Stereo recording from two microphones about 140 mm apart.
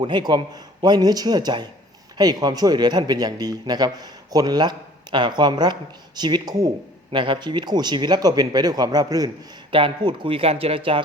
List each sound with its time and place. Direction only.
0.0 s a man's voice: 30° right (ahead or behind)